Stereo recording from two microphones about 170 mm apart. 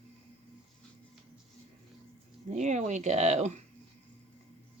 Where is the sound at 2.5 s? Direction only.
45° right (ahead or behind).